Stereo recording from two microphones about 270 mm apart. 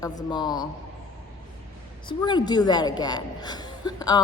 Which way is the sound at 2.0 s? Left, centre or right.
Centre.